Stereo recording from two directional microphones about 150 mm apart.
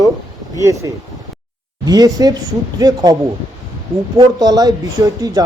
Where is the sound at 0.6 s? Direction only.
20° right (ahead or behind).